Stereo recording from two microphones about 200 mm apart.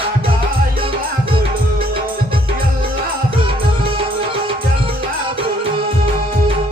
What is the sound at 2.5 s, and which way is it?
Music, 25° right (ahead or behind).